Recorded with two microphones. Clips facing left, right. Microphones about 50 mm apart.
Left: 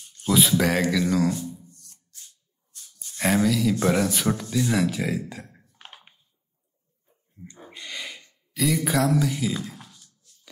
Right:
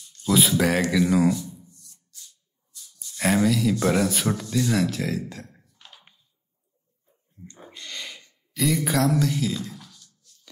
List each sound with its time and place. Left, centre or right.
0.3 s speech: centre
1.0 s speech: centre
1.3 s shuffling cards: left
3.2 s speech: centre
4.6 s speech: centre
5.7 s a sound: left
7.4 s speech: left
7.7 s a sound: centre
8.5 s speech: centre
9.5 s speech: left